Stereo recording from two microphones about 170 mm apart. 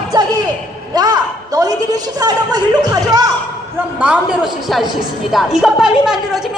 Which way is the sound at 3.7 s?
10° right (ahead or behind).